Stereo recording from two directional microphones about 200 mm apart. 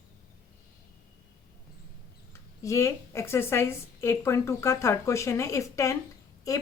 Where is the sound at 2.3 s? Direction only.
15° left (ahead or behind).